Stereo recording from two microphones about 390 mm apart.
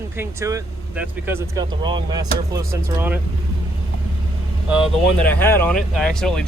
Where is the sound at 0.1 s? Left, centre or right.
Centre.